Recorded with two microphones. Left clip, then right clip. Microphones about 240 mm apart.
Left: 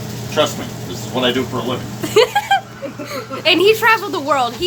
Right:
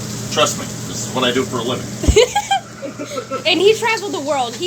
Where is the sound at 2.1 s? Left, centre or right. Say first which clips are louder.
Left 1 dB; centre.